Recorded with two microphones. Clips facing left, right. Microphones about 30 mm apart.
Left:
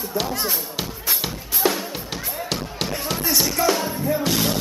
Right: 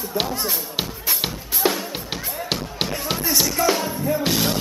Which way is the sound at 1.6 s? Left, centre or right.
Centre.